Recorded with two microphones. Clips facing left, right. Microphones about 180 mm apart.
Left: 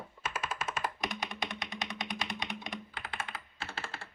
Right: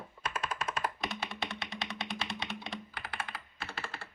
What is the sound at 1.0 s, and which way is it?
Computer keyboard, 15° left (ahead or behind).